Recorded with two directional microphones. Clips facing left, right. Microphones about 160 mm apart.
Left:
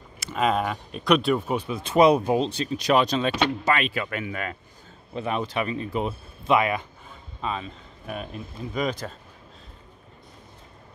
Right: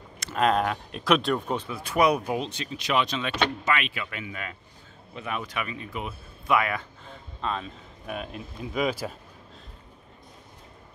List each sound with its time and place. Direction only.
0.2 s speech: centre (ahead or behind)
1.8 s speech: 25° left (ahead or behind); by 4.6 s 50° left (ahead or behind)
5.1 s speech: 30° left (ahead or behind)
7.4 s speech: centre (ahead or behind)